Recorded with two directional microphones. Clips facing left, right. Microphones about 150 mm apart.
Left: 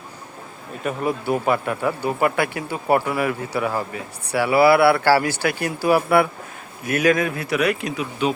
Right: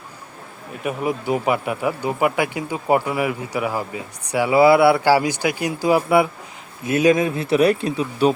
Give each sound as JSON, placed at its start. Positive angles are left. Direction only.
{"t": 0.9, "sound": "speech", "side_deg": -15}